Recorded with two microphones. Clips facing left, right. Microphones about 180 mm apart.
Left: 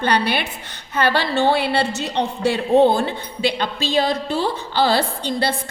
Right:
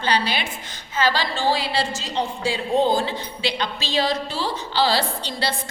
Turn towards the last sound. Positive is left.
turn(degrees=50)  # may be behind; listen again after turning